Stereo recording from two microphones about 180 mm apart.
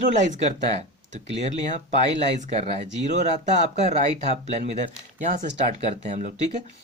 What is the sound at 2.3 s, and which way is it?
Speech, 40° right (ahead or behind).